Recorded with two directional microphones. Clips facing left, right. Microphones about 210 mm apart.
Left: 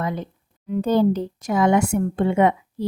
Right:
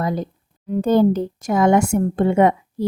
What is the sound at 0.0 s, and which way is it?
Speech, 40° right (ahead or behind).